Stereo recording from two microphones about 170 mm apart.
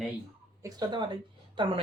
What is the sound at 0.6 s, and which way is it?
A woman's voice, 20° right (ahead or behind).